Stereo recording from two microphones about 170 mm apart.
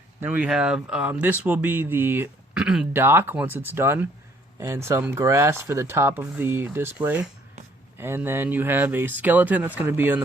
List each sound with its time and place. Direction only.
0.2 s speech: 10° right (ahead or behind)